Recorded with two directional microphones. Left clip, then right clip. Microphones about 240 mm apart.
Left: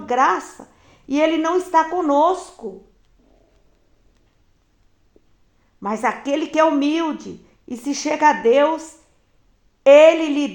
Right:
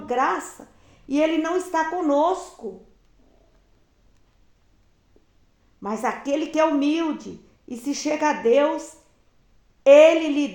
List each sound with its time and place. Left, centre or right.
0.0 s a woman's voice: left
5.8 s speech: left